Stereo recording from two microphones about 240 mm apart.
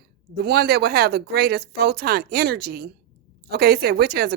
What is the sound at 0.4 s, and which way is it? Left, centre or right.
Speech, right.